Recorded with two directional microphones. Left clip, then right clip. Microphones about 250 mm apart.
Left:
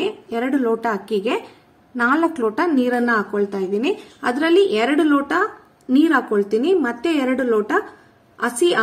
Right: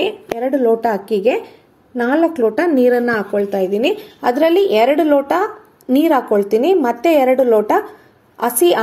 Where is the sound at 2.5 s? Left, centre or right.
Centre.